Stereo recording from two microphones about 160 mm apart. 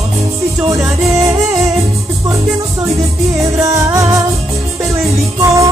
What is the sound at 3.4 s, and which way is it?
Music, 20° right (ahead or behind).